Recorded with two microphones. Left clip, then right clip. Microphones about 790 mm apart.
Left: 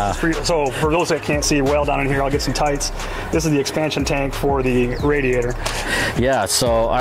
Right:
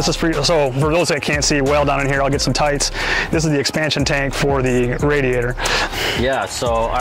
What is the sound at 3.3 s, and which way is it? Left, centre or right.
Speech, right.